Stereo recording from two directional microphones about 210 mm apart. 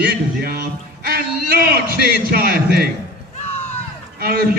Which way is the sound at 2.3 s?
45° right (ahead or behind).